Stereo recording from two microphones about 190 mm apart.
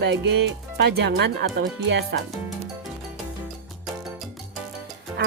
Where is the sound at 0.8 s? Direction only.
65° right (ahead or behind).